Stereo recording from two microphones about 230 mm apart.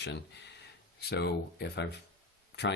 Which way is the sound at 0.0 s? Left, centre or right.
Left.